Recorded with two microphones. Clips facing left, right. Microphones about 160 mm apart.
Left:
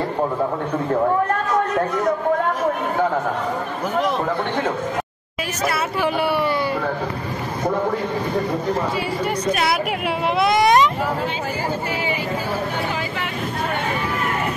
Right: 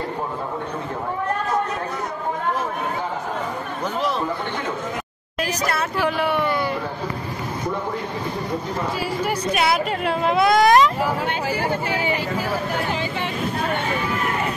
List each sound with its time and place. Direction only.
5.7 s speech: 5° left (ahead or behind)
9.2 s speech: 5° right (ahead or behind)